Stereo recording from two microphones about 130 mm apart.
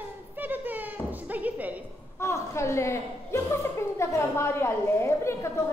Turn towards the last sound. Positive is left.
turn(degrees=20)  # may be behind; listen again after turning